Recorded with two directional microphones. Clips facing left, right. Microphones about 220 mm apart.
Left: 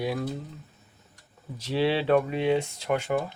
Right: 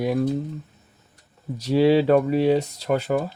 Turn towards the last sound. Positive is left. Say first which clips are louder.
# right 4 dB
turn(degrees=-35)  # may be behind; listen again after turning